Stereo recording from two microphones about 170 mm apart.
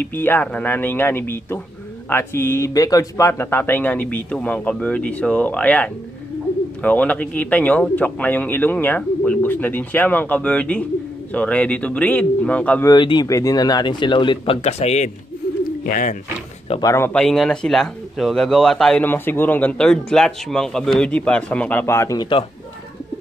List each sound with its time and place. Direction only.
0.0 s speech: 10° left (ahead or behind)
12.8 s speech: 25° left (ahead or behind)
15.8 s speech: 50° left (ahead or behind)
16.8 s speech: 15° left (ahead or behind)
17.1 s speech: 5° left (ahead or behind); by 22.4 s 20° left (ahead or behind)